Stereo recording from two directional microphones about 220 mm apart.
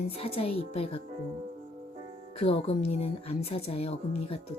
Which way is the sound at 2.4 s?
25° left (ahead or behind).